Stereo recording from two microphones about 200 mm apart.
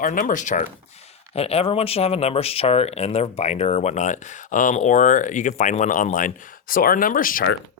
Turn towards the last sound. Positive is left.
turn(degrees=45)  # may be behind; listen again after turning